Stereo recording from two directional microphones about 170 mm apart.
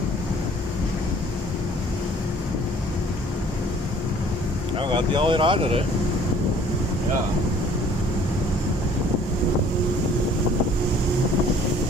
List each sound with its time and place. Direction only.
4.7 s speech: 30° right (ahead or behind)